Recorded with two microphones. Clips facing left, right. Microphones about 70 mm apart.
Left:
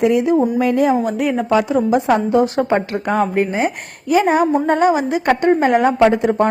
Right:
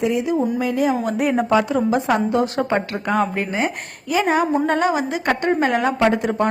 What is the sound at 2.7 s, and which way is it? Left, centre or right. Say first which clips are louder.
Speech: left 3 dB; centre.